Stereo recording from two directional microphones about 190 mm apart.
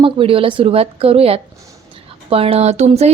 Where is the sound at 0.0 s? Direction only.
30° right (ahead or behind).